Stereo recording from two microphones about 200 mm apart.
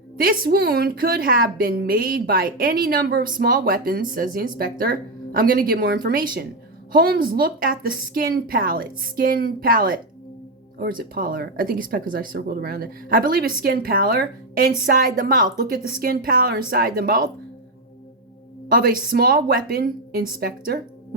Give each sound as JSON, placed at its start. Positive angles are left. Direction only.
{"t": 0.2, "sound": "a woman's voice", "side_deg": -50}
{"t": 18.7, "sound": "a woman's voice", "side_deg": -45}